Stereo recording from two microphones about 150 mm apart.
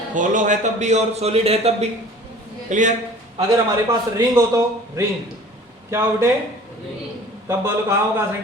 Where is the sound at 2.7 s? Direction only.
55° right (ahead or behind).